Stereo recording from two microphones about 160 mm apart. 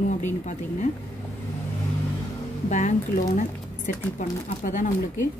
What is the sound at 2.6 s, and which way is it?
Speech, 50° left (ahead or behind).